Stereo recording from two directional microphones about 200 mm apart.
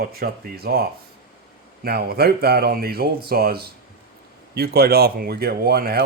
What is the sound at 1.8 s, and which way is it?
Speech, 50° right (ahead or behind).